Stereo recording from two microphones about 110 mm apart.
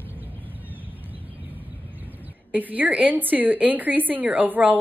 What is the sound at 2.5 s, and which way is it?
A woman's voice, 15° right (ahead or behind).